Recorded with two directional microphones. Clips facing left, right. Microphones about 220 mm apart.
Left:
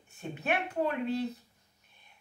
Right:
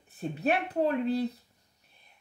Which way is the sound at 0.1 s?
35° right (ahead or behind).